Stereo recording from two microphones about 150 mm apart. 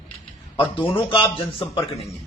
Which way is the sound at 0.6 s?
15° left (ahead or behind).